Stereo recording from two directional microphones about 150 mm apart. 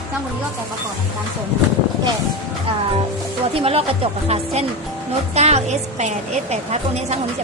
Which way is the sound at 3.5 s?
40° right (ahead or behind).